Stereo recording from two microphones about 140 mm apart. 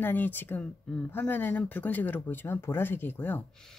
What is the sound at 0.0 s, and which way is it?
Speech, 15° left (ahead or behind).